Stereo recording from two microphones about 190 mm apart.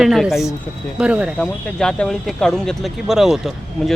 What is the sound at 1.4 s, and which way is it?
Speech, 5° left (ahead or behind).